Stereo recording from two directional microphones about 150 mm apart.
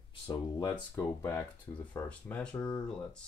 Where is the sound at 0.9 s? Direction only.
15° left (ahead or behind).